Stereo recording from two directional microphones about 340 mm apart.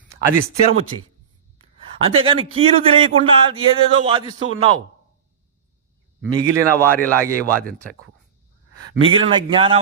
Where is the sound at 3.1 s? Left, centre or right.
Right.